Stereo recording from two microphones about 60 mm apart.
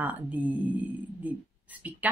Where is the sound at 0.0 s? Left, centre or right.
Right.